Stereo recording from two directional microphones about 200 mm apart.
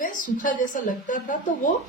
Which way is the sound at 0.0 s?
40° left (ahead or behind).